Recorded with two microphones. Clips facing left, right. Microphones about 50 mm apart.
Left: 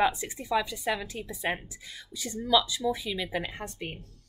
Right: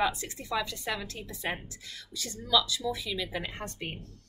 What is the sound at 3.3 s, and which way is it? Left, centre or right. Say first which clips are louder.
Speech: left 3 dB; centre.